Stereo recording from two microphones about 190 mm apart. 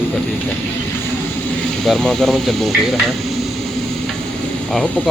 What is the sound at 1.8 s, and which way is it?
Speech, 5° left (ahead or behind).